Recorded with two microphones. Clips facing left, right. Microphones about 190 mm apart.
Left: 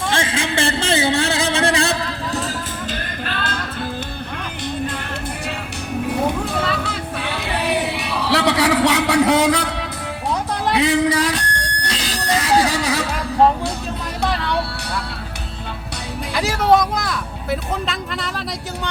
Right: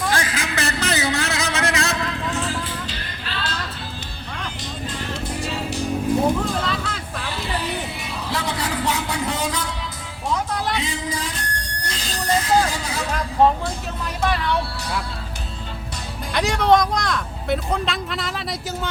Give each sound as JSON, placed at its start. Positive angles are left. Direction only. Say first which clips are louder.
{"t": 0.1, "sound": "a sound", "louder": "left 3 dB", "side_deg": 25}
{"t": 3.2, "sound": "music", "louder": "left 2 dB", "side_deg": 50}
{"t": 7.2, "sound": "music", "louder": "left 3 dB", "side_deg": 65}
{"t": 16.3, "sound": "speech", "louder": "left 1 dB", "side_deg": 5}